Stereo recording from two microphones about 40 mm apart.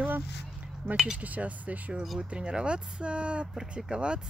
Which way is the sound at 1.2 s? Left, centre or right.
Right.